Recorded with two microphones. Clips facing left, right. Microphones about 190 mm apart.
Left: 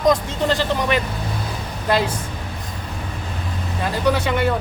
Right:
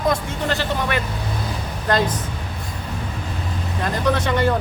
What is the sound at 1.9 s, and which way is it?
Speech, 10° left (ahead or behind).